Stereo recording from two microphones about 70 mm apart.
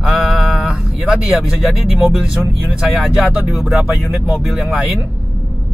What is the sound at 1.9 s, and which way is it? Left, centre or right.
Speech, centre.